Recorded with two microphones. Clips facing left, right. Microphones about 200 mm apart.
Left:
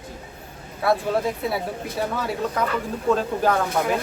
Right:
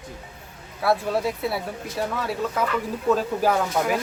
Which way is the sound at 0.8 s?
Centre (ahead or behind).